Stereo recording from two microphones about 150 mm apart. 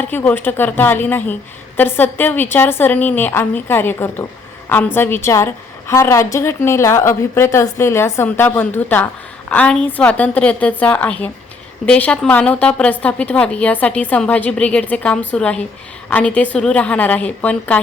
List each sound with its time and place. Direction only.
0.1 s a woman's voice: 15° left (ahead or behind)